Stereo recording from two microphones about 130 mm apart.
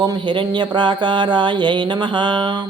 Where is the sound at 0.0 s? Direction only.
35° right (ahead or behind).